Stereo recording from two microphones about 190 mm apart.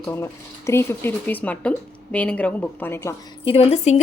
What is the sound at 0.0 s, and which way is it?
Speech, 15° left (ahead or behind).